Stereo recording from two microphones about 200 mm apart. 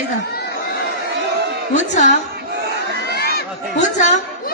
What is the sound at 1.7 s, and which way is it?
Speech, 35° left (ahead or behind).